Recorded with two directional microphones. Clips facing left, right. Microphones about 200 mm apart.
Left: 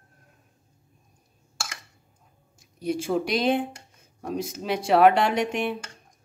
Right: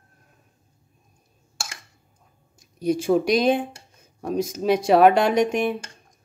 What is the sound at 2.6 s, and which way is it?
Speech, 40° right (ahead or behind).